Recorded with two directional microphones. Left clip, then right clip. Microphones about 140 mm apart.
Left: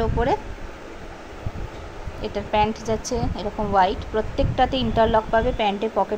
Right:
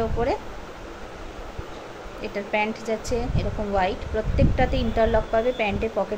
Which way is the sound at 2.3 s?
20° left (ahead or behind).